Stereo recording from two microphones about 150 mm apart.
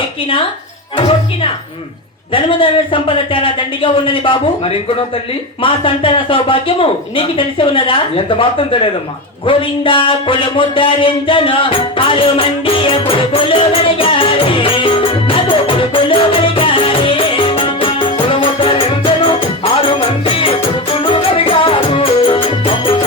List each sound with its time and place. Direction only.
0.9 s speech: 35° left (ahead or behind)
5.6 s speech: 35° left (ahead or behind)
9.5 s a sound: 35° left (ahead or behind)